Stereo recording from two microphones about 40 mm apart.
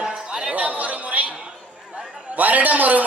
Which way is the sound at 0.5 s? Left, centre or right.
Right.